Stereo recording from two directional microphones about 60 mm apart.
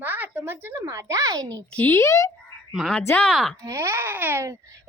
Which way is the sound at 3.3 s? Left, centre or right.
Centre.